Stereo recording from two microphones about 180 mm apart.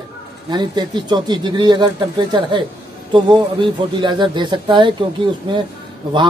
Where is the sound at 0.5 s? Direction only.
25° right (ahead or behind).